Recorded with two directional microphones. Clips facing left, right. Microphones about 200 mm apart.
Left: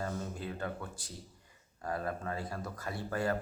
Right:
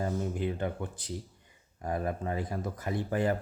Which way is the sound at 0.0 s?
20° right (ahead or behind).